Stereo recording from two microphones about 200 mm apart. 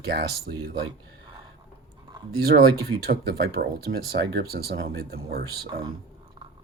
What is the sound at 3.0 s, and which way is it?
Speech, 50° right (ahead or behind).